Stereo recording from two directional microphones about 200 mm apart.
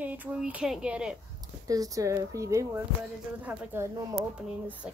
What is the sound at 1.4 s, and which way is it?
A woman's voice, 15° right (ahead or behind).